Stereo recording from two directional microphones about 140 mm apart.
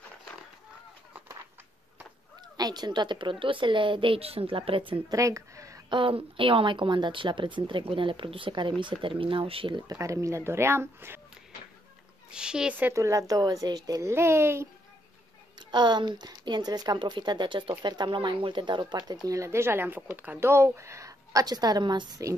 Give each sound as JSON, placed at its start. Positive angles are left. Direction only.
{"t": 2.5, "sound": "speech", "side_deg": -30}
{"t": 5.1, "sound": "speech", "side_deg": -25}
{"t": 5.9, "sound": "speech", "side_deg": -40}
{"t": 9.8, "sound": "speech", "side_deg": -20}
{"t": 12.3, "sound": "speech", "side_deg": -5}
{"t": 15.7, "sound": "speech", "side_deg": -30}